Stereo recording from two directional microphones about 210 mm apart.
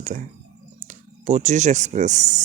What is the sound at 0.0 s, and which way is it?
Speech, 35° right (ahead or behind).